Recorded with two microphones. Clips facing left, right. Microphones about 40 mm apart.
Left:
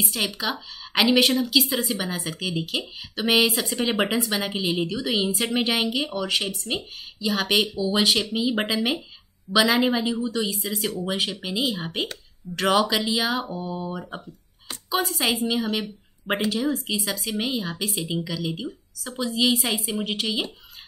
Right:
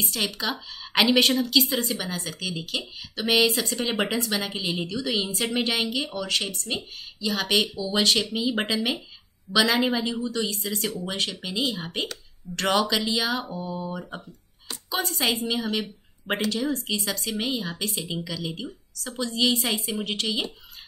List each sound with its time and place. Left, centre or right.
0.0 s a woman's voice: centre
13.6 s speech: left
14.9 s a woman's voice: centre